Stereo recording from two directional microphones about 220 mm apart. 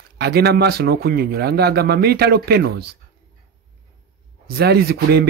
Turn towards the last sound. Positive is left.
turn(degrees=-45)  # may be behind; listen again after turning